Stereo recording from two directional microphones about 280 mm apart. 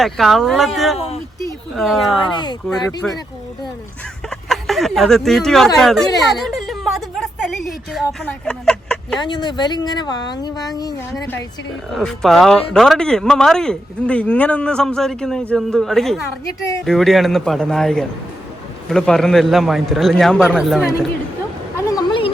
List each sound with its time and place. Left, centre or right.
0.0 s a man's voice: centre
0.9 s speech: left
1.7 s a man's voice: centre
2.1 s speech: centre
2.6 s a man's voice: centre
4.3 s speech: centre
6.3 s a sound: centre
9.1 s speech: centre
11.9 s a man's voice: centre
21.8 s vehicle: centre